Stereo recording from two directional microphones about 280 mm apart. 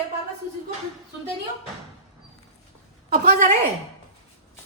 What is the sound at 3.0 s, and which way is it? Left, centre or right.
Speech, right.